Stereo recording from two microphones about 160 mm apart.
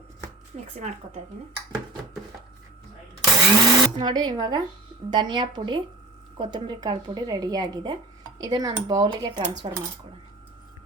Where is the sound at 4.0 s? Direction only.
25° right (ahead or behind).